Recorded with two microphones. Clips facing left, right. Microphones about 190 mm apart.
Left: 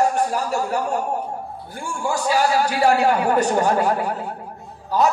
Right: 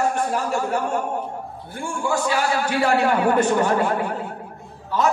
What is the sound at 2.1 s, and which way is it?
A man's voice, 40° left (ahead or behind).